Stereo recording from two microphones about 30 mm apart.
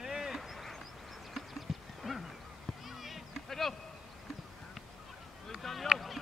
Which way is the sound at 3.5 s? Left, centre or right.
Centre.